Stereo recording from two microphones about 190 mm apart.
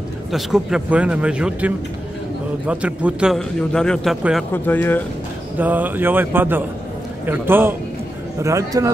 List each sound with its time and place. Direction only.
0.3 s a man's voice: 5° right (ahead or behind)
4.6 s speech: 10° left (ahead or behind)
5.6 s speech: 10° right (ahead or behind)